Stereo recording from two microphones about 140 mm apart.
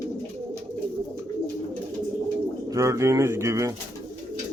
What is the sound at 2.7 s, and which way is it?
A man's voice, 20° right (ahead or behind).